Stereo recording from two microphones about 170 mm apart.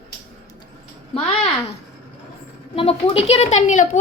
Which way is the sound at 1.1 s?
35° left (ahead or behind).